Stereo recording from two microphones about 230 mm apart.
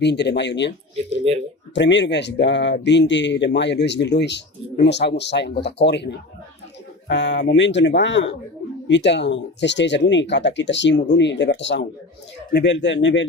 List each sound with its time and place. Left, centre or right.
0.0 s speech: left
1.3 s speech: right
1.7 s speech: left